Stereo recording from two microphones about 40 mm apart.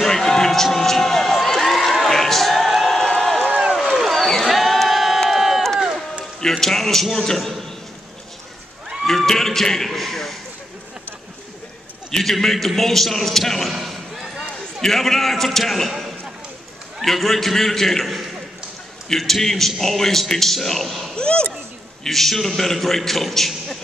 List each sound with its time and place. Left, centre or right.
0.0 s a sound: centre
3.9 s a sound: centre
4.3 s a sound: centre
5.3 s crowd: centre
6.6 s a man's voice: centre
9.0 s a man's voice: centre
12.1 s a man's voice: centre
17.0 s a man's voice: centre
21.1 s speech: left
22.0 s a man's voice: centre